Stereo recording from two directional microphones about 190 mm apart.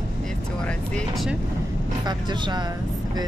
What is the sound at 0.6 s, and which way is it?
Speech, centre (ahead or behind).